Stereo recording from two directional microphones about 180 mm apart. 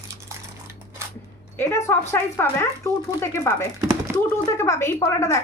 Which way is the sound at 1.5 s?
15° left (ahead or behind).